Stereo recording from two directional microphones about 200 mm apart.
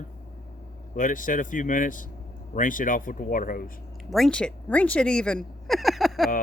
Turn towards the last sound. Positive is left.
turn(degrees=0)  # may be behind; listen again after turning